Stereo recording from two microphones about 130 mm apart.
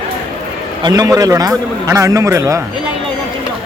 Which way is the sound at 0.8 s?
30° right (ahead or behind).